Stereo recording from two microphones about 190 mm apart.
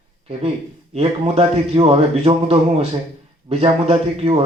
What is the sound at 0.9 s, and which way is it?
Speech, 30° right (ahead or behind).